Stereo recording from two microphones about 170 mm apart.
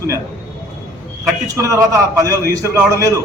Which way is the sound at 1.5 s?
20° right (ahead or behind).